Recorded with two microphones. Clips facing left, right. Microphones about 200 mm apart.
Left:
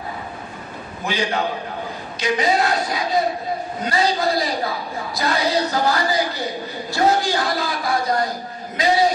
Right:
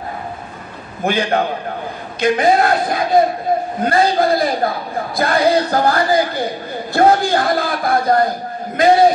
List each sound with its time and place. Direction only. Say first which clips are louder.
1.0 s a man's voice: right 6 dB; 55° right (ahead or behind)